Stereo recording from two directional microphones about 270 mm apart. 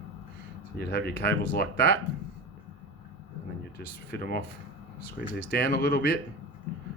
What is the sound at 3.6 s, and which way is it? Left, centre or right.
Speech, left.